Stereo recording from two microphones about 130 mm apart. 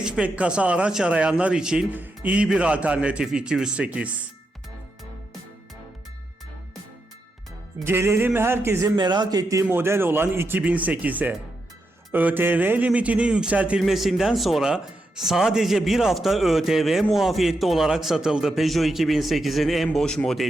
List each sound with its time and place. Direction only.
0.0 s a man's voice: 10° right (ahead or behind)
7.9 s speech: 20° right (ahead or behind)
9.0 s a man's voice: 35° right (ahead or behind); by 20.5 s 5° left (ahead or behind)